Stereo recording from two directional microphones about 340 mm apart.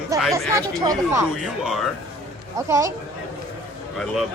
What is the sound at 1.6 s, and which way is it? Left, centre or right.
Speech, centre.